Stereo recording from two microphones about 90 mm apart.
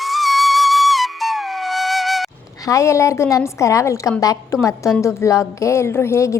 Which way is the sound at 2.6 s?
35° left (ahead or behind).